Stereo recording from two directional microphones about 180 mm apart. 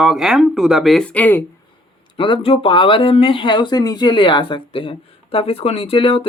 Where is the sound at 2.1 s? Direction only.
30° left (ahead or behind).